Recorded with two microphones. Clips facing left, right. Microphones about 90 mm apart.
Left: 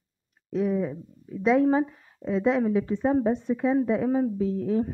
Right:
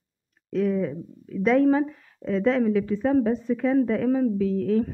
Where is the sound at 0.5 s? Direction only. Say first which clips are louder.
Right 2 dB; 15° left (ahead or behind).